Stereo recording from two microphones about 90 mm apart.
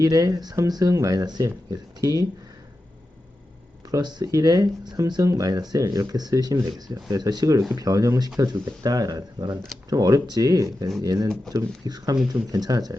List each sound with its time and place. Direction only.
0.0 s speech: 40° right (ahead or behind)
4.0 s speech: 45° right (ahead or behind)